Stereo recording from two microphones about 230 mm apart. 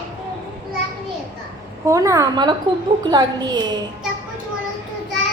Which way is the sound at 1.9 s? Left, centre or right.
Centre.